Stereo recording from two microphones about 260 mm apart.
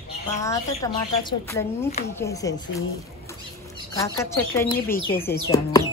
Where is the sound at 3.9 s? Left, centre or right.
Centre.